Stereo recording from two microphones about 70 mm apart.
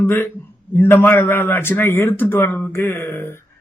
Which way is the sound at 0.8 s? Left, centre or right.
Left.